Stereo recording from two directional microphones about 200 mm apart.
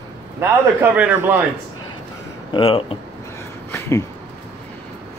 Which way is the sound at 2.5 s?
25° left (ahead or behind).